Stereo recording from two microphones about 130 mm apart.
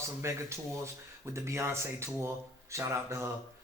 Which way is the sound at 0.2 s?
20° right (ahead or behind).